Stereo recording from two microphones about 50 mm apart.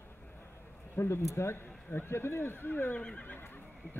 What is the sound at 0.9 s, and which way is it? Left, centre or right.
Speech, left.